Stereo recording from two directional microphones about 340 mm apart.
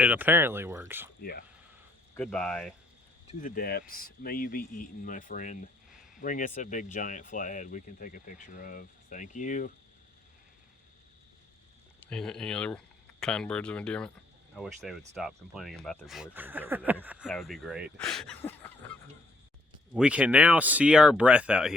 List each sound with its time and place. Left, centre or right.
0.0 s speech: centre
1.2 s speech: left
2.1 s speech: centre
3.4 s speech: left
12.0 s speech: centre